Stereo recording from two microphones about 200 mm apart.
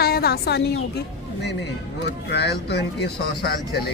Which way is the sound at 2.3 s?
55° left (ahead or behind).